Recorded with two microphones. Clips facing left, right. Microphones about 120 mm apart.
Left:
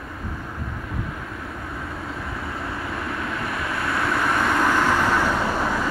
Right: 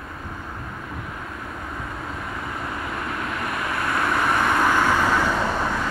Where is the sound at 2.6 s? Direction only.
20° right (ahead or behind).